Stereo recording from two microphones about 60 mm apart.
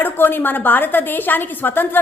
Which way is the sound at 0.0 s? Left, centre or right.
Left.